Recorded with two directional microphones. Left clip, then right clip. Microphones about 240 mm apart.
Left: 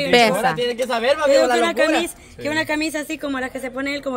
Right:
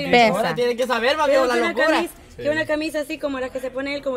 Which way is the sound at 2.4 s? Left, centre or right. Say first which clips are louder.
Even; left.